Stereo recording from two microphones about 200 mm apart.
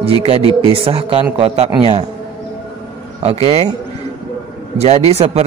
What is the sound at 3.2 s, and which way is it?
Speech, 30° right (ahead or behind).